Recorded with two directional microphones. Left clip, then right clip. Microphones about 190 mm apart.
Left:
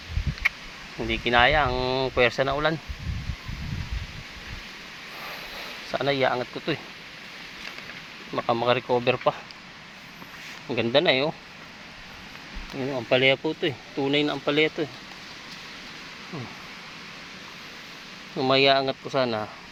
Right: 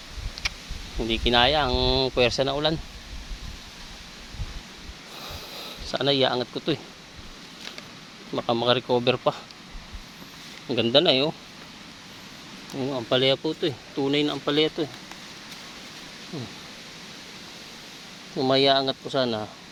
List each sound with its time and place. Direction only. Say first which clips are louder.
1.3 s speech: left 1 dB; 20° right (ahead or behind)
5.9 s speech: right 1 dB; 20° right (ahead or behind)
8.3 s speech: even; 15° right (ahead or behind)
10.7 s speech: right 1 dB; 15° right (ahead or behind)
12.8 s speech: left 1 dB; centre (ahead or behind)
18.3 s speech: even; 5° right (ahead or behind)